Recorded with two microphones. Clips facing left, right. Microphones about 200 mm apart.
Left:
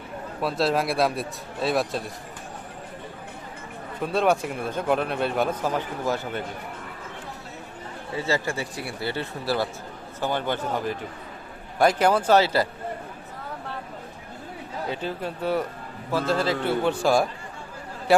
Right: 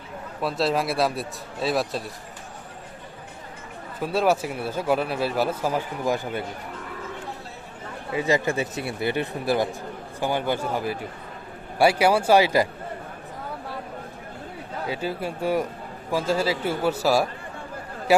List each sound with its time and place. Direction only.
0.4 s speech: centre (ahead or behind)
4.0 s speech: 5° right (ahead or behind)
8.1 s speech: 15° right (ahead or behind)
14.8 s speech: 10° right (ahead or behind)